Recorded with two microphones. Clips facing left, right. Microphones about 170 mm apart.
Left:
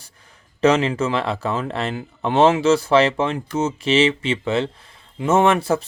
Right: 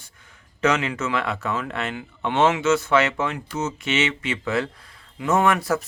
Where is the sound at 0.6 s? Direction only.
30° left (ahead or behind).